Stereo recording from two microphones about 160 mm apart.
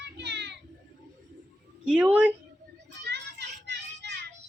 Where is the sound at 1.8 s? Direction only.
5° right (ahead or behind).